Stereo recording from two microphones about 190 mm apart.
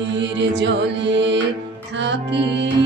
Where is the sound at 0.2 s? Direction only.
65° right (ahead or behind).